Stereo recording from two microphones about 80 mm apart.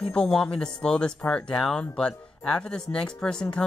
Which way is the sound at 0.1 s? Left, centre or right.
Centre.